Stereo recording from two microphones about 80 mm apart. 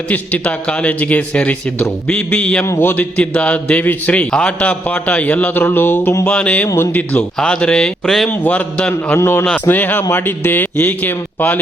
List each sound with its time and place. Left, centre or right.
0.1 s a man's voice: centre
6.2 s a man's voice: centre
8.3 s a man's voice: centre
9.1 s a man's voice: left